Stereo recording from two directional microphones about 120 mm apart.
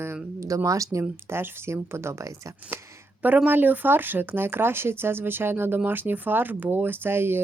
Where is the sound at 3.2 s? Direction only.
15° right (ahead or behind).